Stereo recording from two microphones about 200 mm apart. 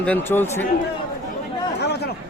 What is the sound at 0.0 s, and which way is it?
Speech, 10° left (ahead or behind).